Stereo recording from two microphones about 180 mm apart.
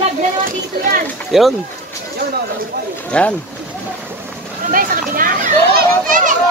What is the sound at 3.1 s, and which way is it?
Speech, 5° left (ahead or behind).